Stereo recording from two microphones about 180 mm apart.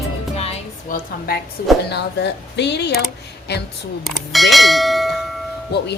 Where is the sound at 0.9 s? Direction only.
50° left (ahead or behind).